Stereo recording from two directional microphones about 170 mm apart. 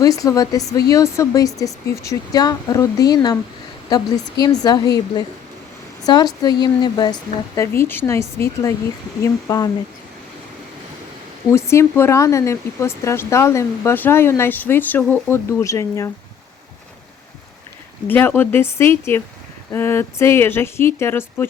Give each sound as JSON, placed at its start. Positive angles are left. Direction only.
{"t": 0.0, "sound": "speech", "side_deg": 20}
{"t": 6.0, "sound": "speech", "side_deg": 25}
{"t": 11.5, "sound": "speech", "side_deg": 15}
{"t": 18.1, "sound": "speech", "side_deg": 10}